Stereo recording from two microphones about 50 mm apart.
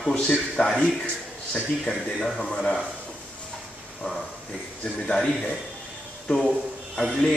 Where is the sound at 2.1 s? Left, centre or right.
Centre.